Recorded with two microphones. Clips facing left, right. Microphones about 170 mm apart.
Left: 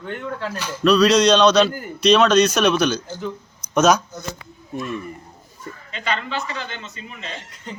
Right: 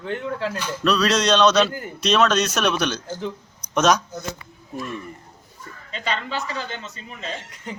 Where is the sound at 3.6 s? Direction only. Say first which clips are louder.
Left 3 dB; 5° left (ahead or behind).